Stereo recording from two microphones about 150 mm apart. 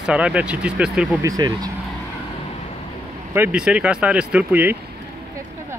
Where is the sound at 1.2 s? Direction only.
25° right (ahead or behind).